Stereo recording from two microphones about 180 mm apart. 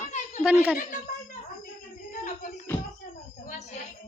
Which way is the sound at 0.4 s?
10° right (ahead or behind).